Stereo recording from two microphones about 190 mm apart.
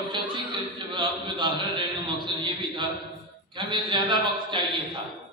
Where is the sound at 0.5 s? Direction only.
25° right (ahead or behind).